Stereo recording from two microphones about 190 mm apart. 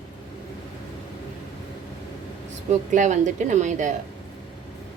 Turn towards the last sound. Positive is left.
turn(degrees=-40)  # may be behind; listen again after turning